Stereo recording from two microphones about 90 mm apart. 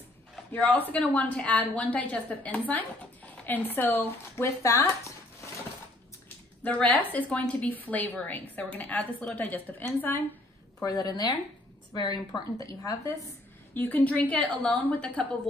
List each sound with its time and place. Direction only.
0.5 s a woman's voice: 15° left (ahead or behind)
4.6 s a sound: 35° left (ahead or behind)
6.6 s a woman's voice: 15° left (ahead or behind)
10.8 s a woman's voice: 40° left (ahead or behind)
12.3 s a woman's voice: 35° left (ahead or behind)
13.7 s a woman's voice: 20° left (ahead or behind)